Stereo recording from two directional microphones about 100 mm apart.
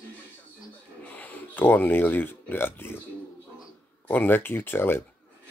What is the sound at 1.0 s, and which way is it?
Speech, 15° left (ahead or behind).